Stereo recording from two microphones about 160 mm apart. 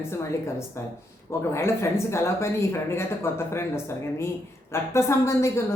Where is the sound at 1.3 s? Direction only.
15° left (ahead or behind).